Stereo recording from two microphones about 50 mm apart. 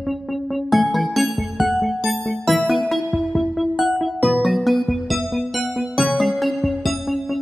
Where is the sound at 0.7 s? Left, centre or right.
Centre.